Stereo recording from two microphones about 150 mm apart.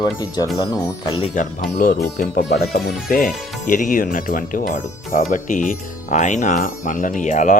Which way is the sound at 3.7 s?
65° left (ahead or behind).